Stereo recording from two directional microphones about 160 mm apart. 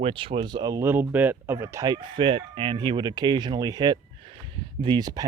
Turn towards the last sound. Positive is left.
turn(degrees=-25)  # may be behind; listen again after turning